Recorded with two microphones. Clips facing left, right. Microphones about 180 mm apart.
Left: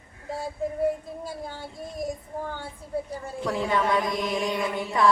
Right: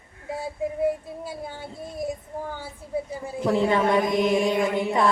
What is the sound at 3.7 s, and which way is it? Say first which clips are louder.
Chant: right 4 dB; 20° right (ahead or behind).